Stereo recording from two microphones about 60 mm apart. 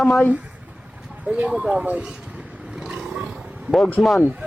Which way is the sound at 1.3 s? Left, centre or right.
Right.